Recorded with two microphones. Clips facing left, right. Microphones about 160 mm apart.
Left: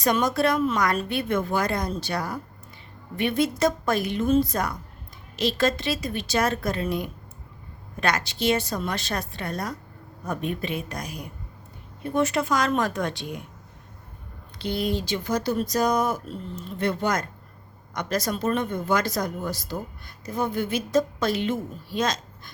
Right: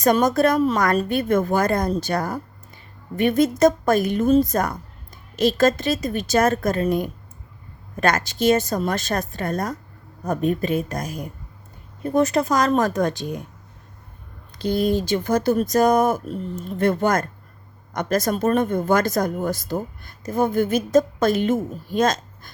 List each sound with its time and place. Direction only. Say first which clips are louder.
0.0 s speech: right 5 dB; 45° right (ahead or behind)
14.6 s speech: right 6 dB; 45° right (ahead or behind)